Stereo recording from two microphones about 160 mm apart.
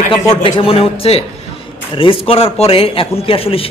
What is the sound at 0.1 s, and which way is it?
A man's voice, 35° left (ahead or behind).